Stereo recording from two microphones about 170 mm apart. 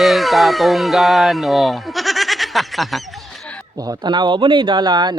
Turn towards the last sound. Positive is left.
turn(degrees=-25)  # may be behind; listen again after turning